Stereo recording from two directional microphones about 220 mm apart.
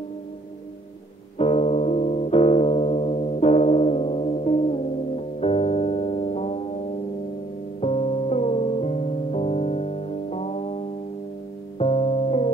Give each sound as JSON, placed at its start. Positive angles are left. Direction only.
{"t": 1.4, "sound": "music", "side_deg": 30}
{"t": 7.8, "sound": "music", "side_deg": 30}
{"t": 11.8, "sound": "music", "side_deg": 25}